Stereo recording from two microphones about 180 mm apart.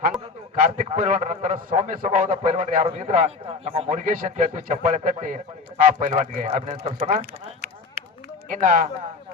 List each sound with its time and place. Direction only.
0.5 s a man's voice: 50° right (ahead or behind)
8.4 s a man's voice: 45° right (ahead or behind)